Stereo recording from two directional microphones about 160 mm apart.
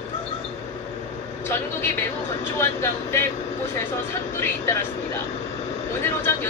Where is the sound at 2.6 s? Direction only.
15° left (ahead or behind).